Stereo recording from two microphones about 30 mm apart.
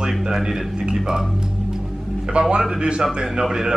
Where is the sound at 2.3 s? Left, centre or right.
Right.